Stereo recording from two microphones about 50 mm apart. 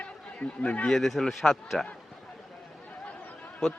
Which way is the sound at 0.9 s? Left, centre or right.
Centre.